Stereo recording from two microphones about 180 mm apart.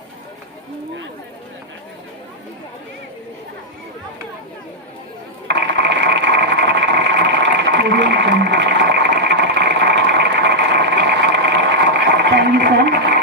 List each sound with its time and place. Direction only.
5.5 s sewing machine: 70° right (ahead or behind)